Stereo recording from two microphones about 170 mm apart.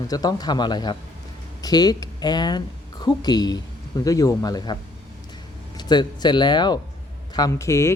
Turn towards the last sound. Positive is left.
turn(degrees=15)  # may be behind; listen again after turning